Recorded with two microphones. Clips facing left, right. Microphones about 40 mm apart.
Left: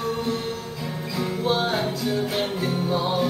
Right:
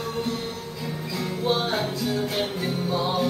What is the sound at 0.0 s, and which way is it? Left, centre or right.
Music, centre.